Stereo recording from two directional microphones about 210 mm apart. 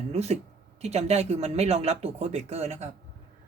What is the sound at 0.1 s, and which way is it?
Speech, 30° right (ahead or behind).